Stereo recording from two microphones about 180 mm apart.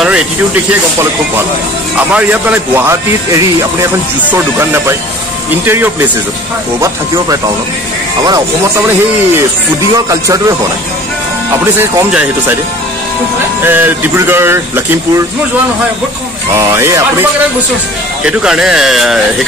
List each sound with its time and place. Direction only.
2.0 s speech: 10° right (ahead or behind)
8.3 s speech: 15° right (ahead or behind)
11.5 s speech: 10° right (ahead or behind)
13.6 s speech: 10° right (ahead or behind)
16.5 s speech: 15° right (ahead or behind)
18.2 s speech: 5° right (ahead or behind)